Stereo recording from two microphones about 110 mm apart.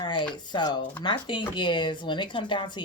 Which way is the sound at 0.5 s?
45° left (ahead or behind).